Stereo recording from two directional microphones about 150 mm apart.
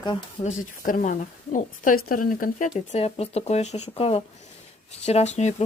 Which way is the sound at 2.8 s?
45° left (ahead or behind).